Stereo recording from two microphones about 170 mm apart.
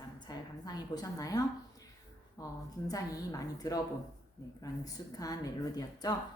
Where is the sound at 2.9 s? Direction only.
20° left (ahead or behind).